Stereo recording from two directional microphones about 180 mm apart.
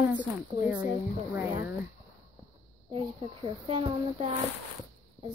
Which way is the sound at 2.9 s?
30° right (ahead or behind).